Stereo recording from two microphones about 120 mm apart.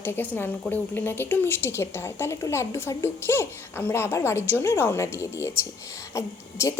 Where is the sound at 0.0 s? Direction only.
15° left (ahead or behind).